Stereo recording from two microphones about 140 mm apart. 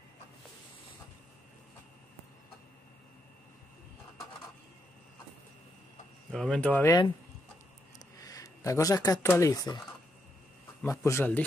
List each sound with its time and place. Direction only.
6.3 s speech: 5° left (ahead or behind)
8.2 s a sound: 25° left (ahead or behind)
9.3 s speech: 25° left (ahead or behind)
10.8 s speech: 20° left (ahead or behind)